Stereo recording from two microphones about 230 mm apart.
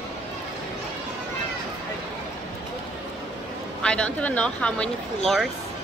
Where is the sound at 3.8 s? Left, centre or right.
Centre.